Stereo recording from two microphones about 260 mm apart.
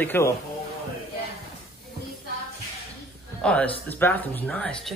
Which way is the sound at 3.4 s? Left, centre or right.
Centre.